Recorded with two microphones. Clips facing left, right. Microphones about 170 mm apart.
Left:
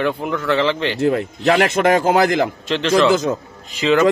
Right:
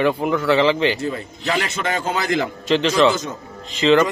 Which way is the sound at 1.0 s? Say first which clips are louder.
Left 8 dB; 65° left (ahead or behind).